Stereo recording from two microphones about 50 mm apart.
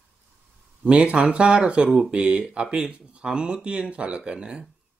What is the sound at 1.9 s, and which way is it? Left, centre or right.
Speech, centre.